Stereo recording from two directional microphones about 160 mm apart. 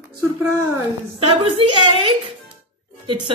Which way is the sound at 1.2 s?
35° right (ahead or behind).